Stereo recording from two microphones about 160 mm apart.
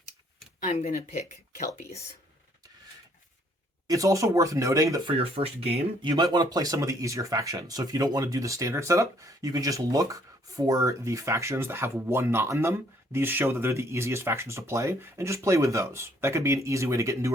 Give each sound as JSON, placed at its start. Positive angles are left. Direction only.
{"t": 0.6, "sound": "speech", "side_deg": 50}
{"t": 3.8, "sound": "speech", "side_deg": -20}
{"t": 5.1, "sound": "speech", "side_deg": -35}